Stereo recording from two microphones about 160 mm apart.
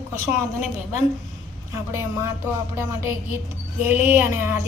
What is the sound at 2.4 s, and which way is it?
A woman's voice, 15° right (ahead or behind).